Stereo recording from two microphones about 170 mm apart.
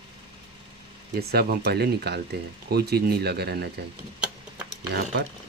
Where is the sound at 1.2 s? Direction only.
70° right (ahead or behind).